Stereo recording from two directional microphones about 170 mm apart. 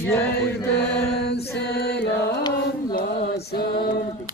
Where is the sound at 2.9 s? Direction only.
65° left (ahead or behind).